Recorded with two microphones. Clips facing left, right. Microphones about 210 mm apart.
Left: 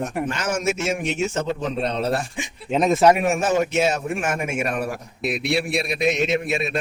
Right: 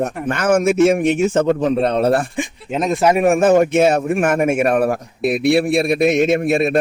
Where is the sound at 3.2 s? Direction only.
55° right (ahead or behind).